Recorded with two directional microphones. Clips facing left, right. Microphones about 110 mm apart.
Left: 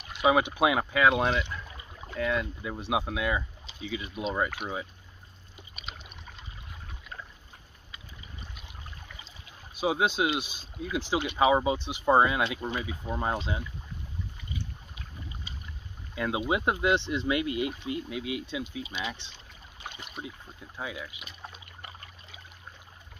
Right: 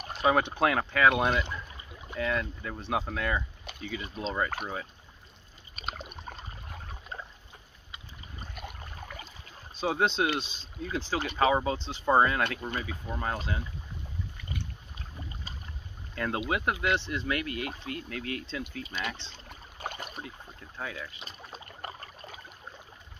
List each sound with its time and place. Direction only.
0.2 s speech: 10° left (ahead or behind)
5.8 s a sound: 45° right (ahead or behind)
8.4 s boat: 50° right (ahead or behind)
9.8 s speech: 5° left (ahead or behind)
16.2 s speech: 10° left (ahead or behind)
16.4 s speech: 20° left (ahead or behind)
19.3 s boat: 45° right (ahead or behind)
20.2 s speech: 10° left (ahead or behind)
21.2 s a sound: 40° right (ahead or behind)